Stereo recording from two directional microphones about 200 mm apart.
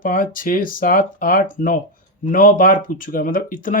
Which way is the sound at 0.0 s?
45° left (ahead or behind).